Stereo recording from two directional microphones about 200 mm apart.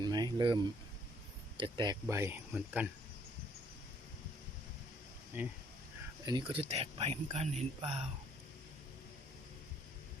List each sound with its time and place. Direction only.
0.0 s a sound: 20° right (ahead or behind)
1.5 s speech: 20° right (ahead or behind); by 2.9 s 5° right (ahead or behind)
5.3 s speech: 10° right (ahead or behind)
6.2 s speech: 20° right (ahead or behind)